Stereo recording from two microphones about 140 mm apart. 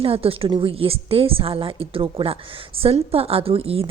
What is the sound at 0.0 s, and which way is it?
A woman's voice, 45° right (ahead or behind).